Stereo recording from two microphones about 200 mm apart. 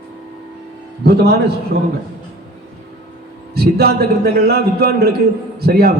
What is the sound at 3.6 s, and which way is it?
A man's voice, 50° right (ahead or behind).